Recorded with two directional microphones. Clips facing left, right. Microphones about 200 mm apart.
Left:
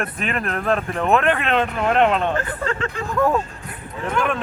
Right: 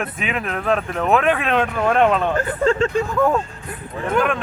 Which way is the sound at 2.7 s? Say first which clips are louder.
Right 8 dB; 30° right (ahead or behind).